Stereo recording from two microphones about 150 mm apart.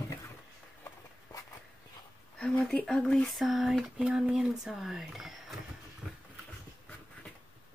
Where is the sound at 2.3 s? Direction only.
5° left (ahead or behind).